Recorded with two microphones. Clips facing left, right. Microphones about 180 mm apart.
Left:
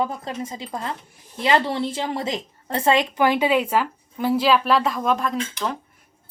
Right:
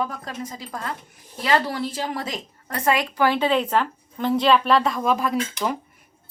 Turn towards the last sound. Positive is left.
turn(degrees=-10)  # may be behind; listen again after turning